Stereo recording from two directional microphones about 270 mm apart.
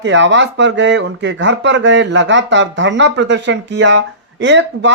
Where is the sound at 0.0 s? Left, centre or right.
Right.